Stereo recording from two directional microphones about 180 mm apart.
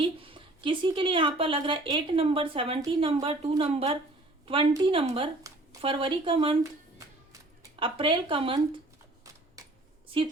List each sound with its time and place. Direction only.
0.0 s a woman's voice: 30° right (ahead or behind)
7.8 s a woman's voice: 30° right (ahead or behind)
9.6 s a sound: 20° right (ahead or behind)